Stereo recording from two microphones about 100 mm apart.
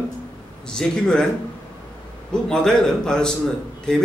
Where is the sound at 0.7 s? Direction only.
10° left (ahead or behind).